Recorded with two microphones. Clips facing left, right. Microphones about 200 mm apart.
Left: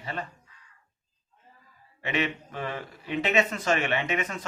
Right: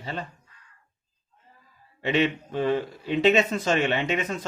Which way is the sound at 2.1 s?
30° right (ahead or behind).